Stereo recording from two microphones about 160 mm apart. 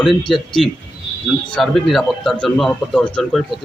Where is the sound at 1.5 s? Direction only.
Centre (ahead or behind).